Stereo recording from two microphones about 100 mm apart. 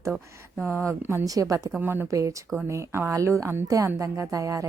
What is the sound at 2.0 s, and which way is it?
A woman's voice, 30° right (ahead or behind).